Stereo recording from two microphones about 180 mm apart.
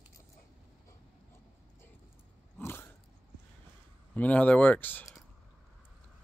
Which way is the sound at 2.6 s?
10° left (ahead or behind).